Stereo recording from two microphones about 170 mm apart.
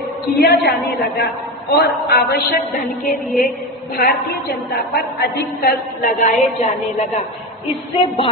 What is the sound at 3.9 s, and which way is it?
A woman's voice, 65° left (ahead or behind).